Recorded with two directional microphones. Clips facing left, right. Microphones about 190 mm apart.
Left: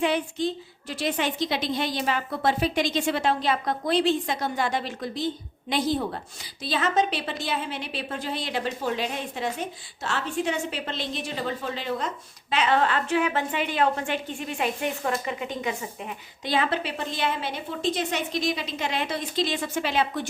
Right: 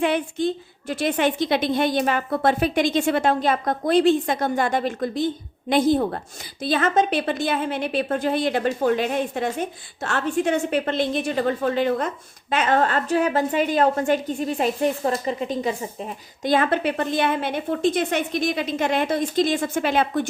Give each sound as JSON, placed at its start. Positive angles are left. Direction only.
{"t": 0.0, "sound": "a woman's voice", "side_deg": -55}
{"t": 16.4, "sound": "a woman's voice", "side_deg": -50}